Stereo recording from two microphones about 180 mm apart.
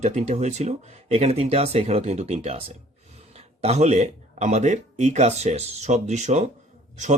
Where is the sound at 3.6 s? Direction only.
35° right (ahead or behind).